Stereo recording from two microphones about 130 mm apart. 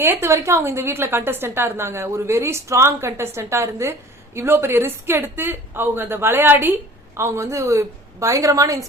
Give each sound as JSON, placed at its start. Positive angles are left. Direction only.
{"t": 0.0, "sound": "a woman's voice", "side_deg": -20}